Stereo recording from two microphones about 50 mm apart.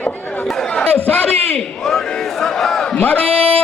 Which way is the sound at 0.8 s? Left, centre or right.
Left.